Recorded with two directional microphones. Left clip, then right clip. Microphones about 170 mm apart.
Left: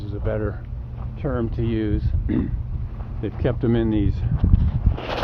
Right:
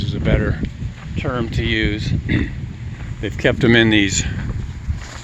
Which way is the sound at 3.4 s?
55° right (ahead or behind).